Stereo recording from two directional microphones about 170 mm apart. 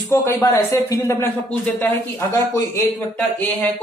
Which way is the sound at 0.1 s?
15° left (ahead or behind).